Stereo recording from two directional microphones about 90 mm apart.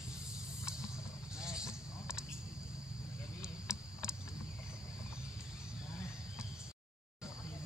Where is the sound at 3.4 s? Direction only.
10° right (ahead or behind).